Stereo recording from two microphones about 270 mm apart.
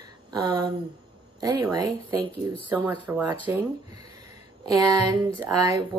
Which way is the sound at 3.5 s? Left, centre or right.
Centre.